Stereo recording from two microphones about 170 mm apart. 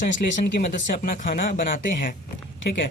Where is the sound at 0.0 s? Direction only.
50° left (ahead or behind).